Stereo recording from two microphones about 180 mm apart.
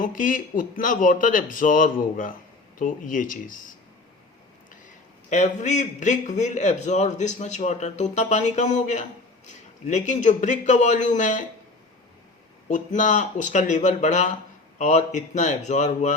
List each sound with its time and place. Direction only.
0.0 s speech: 50° left (ahead or behind)
5.3 s a man's voice: 40° left (ahead or behind)
12.6 s a man's voice: 40° left (ahead or behind)